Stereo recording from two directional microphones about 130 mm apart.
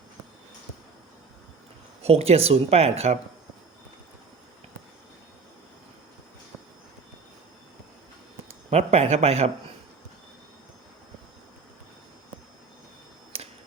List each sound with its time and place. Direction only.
2.0 s speech: 55° right (ahead or behind)
8.7 s speech: 55° right (ahead or behind)